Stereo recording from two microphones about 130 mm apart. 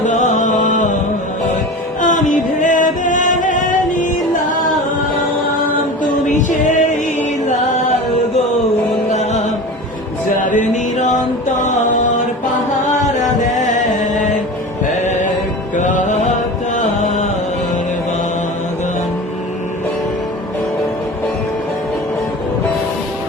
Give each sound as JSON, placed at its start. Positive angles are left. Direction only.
{"t": 0.0, "sound": "music", "side_deg": 70}
{"t": 2.0, "sound": "music", "side_deg": 75}
{"t": 6.0, "sound": "music", "side_deg": 75}
{"t": 9.0, "sound": "music", "side_deg": 60}
{"t": 10.2, "sound": "music", "side_deg": 80}
{"t": 15.7, "sound": "music", "side_deg": 75}